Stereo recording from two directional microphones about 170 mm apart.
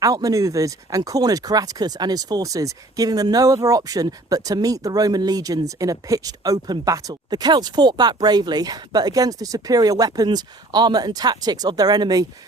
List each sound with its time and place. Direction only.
0.0 s speech: 20° right (ahead or behind)